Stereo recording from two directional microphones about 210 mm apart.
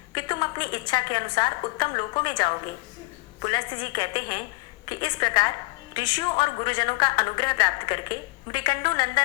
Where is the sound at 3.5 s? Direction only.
20° left (ahead or behind).